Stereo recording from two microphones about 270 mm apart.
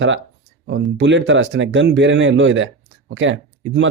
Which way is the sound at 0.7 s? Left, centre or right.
Right.